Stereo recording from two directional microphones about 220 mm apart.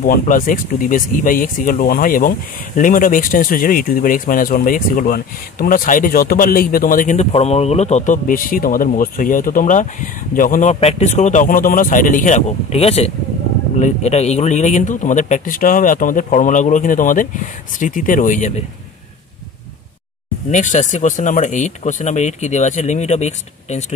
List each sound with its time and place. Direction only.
0.0 s speech: 40° left (ahead or behind)
20.5 s speech: 35° left (ahead or behind)